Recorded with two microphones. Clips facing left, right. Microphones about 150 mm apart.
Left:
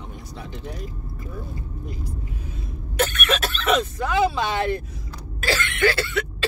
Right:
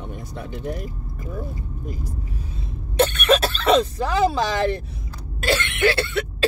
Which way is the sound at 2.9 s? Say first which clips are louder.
Right 6 dB; 35° right (ahead or behind).